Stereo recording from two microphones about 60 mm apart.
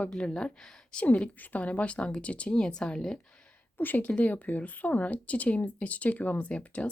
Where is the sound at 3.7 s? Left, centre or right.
Left.